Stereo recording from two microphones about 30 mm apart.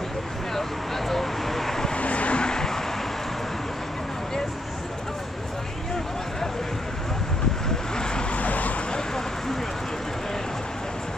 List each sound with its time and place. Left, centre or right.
0.6 s vehicle: centre
2.0 s vehicle: left
2.4 s vehicle: centre
7.9 s vehicle: left
8.4 s vehicle: left